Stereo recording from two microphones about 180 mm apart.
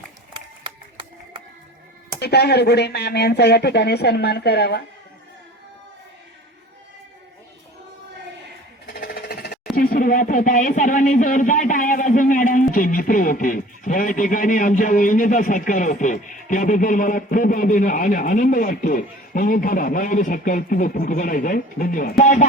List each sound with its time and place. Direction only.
0.3 s a sound: 30° right (ahead or behind)
2.2 s speech: 65° left (ahead or behind)
8.9 s jackhammer: 60° left (ahead or behind)
9.7 s speech: 50° left (ahead or behind)